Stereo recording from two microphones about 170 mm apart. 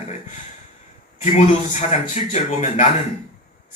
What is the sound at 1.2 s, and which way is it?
A man's voice, 40° left (ahead or behind).